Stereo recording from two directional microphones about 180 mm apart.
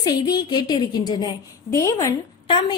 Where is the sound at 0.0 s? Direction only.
20° left (ahead or behind).